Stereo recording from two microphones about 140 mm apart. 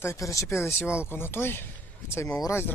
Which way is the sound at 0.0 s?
20° left (ahead or behind).